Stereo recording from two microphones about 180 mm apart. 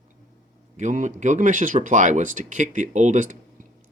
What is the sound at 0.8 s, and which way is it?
Speech, 45° right (ahead or behind).